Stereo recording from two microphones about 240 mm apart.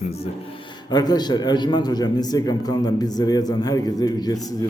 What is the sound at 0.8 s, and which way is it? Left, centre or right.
A man's voice, centre.